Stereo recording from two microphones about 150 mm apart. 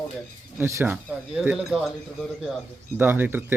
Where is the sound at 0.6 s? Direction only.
15° right (ahead or behind).